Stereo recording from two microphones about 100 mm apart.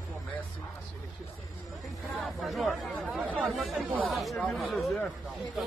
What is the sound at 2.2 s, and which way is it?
Speech, centre (ahead or behind).